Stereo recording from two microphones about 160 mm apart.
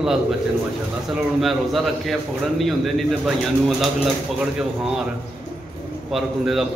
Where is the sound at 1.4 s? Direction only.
Centre (ahead or behind).